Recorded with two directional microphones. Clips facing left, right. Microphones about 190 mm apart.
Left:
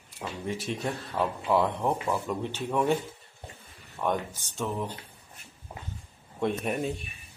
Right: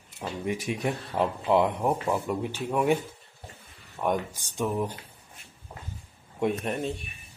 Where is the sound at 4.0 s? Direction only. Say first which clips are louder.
Right 2 dB; 10° right (ahead or behind).